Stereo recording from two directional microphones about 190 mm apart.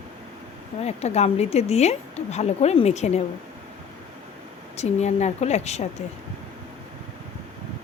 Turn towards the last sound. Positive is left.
turn(degrees=35)  # may be behind; listen again after turning